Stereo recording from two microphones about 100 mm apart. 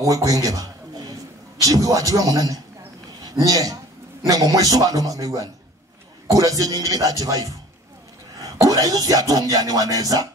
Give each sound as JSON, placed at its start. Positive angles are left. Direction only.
{"t": 0.0, "sound": "a man's voice", "side_deg": -35}
{"t": 8.5, "sound": "speech", "side_deg": -35}